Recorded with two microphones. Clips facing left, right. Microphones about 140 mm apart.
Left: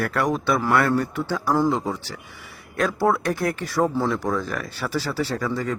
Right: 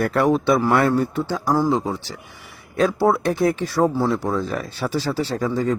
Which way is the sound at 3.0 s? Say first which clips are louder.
Right 1 dB; 5° right (ahead or behind).